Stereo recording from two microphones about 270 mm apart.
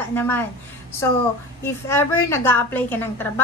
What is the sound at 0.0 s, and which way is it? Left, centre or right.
A woman's voice, centre.